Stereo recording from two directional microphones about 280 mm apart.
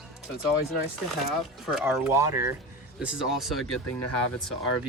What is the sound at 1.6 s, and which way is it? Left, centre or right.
Speech, centre.